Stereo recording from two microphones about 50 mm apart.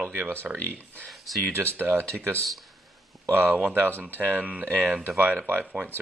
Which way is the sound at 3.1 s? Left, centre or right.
Centre.